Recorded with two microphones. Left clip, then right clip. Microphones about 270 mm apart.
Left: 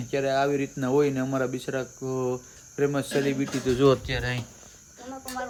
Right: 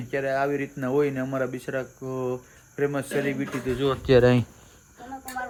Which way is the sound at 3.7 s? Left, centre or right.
Left.